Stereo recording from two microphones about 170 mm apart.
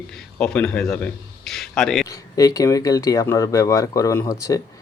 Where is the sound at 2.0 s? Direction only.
20° left (ahead or behind).